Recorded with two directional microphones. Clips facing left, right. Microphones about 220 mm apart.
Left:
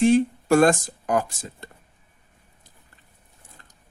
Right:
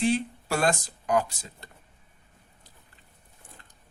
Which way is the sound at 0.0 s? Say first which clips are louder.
Left 8 dB; 45° left (ahead or behind).